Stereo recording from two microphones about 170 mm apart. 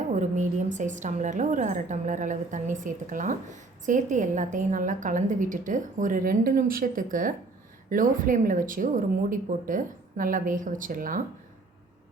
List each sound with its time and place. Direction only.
0.1 s a woman's voice: 45° right (ahead or behind)